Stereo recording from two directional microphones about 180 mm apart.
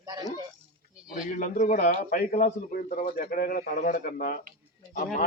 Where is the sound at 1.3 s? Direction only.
45° left (ahead or behind).